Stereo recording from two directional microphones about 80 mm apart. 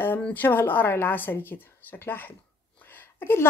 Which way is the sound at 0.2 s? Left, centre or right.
Left.